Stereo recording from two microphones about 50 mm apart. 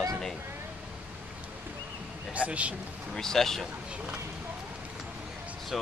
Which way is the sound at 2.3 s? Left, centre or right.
Right.